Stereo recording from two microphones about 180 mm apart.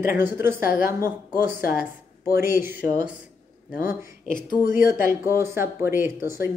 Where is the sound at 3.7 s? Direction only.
15° right (ahead or behind).